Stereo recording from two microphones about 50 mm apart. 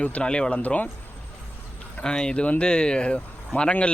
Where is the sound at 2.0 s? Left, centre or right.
Centre.